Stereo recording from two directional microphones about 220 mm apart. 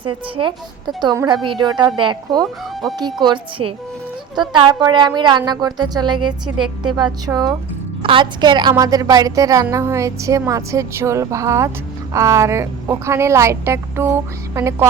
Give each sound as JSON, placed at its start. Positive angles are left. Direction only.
{"t": 0.3, "sound": "a woman's voice", "side_deg": -20}